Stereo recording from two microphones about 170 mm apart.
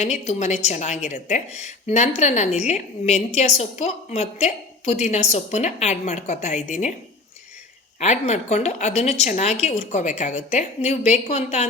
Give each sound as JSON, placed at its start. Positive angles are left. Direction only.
{"t": 0.0, "sound": "a woman's voice", "side_deg": 45}
{"t": 7.9, "sound": "a woman's voice", "side_deg": 40}